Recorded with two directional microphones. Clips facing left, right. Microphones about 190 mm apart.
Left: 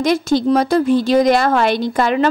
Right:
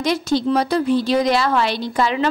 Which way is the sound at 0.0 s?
50° left (ahead or behind).